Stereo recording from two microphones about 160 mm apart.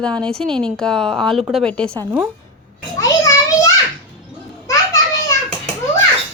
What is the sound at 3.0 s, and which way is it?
Speech, 20° left (ahead or behind).